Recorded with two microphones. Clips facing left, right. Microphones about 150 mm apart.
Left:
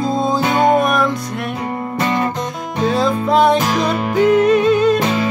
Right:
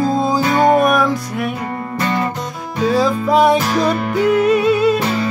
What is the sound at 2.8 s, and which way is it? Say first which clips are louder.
Music: right 1 dB; 5° right (ahead or behind).